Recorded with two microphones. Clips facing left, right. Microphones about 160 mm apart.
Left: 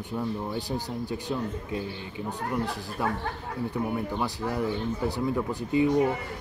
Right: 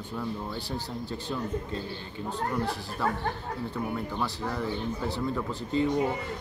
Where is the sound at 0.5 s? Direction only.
15° left (ahead or behind).